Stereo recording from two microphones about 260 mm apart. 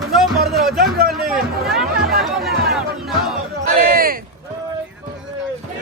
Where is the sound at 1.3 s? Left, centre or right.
Centre.